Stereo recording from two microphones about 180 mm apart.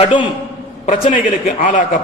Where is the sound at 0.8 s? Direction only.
40° left (ahead or behind).